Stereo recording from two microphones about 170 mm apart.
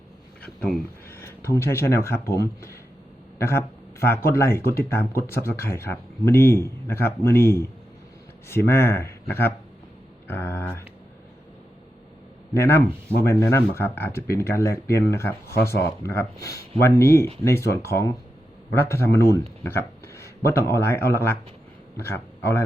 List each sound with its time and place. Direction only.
0.4 s a sound: 5° left (ahead or behind)
1.2 s a man's voice: 15° left (ahead or behind)
12.5 s speech: 15° left (ahead or behind)